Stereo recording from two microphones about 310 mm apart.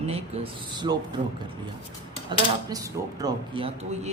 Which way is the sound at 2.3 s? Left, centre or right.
Centre.